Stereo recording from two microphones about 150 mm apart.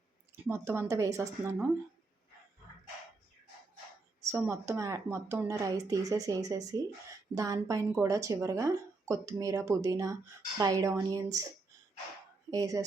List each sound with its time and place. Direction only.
0.4 s a woman's voice: 20° right (ahead or behind)
4.3 s speech: 20° right (ahead or behind)
12.5 s speech: 25° right (ahead or behind)